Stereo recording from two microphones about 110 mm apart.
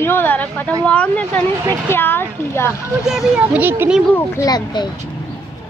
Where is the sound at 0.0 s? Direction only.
20° left (ahead or behind).